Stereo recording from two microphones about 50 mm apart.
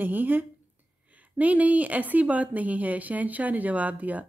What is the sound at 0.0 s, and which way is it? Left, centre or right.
A woman's voice, right.